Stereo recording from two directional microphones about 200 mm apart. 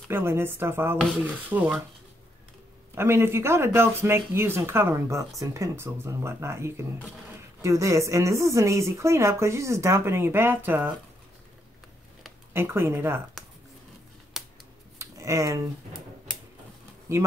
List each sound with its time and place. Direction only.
0.1 s a woman's voice: 10° right (ahead or behind)
2.9 s a woman's voice: 10° right (ahead or behind)
12.5 s a woman's voice: 10° right (ahead or behind)
14.3 s scissors: centre (ahead or behind)
15.0 s a sound: 15° right (ahead or behind)
17.1 s a woman's voice: 15° right (ahead or behind)